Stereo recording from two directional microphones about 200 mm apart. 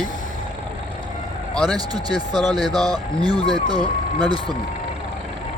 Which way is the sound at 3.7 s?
20° right (ahead or behind).